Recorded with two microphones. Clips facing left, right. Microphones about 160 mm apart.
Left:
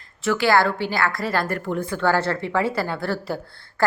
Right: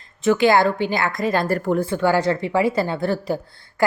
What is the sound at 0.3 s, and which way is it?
A woman's voice, 20° right (ahead or behind).